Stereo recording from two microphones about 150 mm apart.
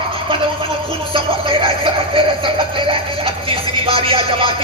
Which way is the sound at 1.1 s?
35° right (ahead or behind).